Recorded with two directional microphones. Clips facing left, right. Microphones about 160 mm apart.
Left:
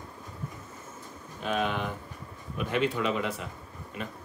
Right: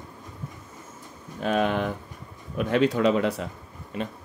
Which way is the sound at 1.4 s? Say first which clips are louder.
Right 6 dB; 45° right (ahead or behind).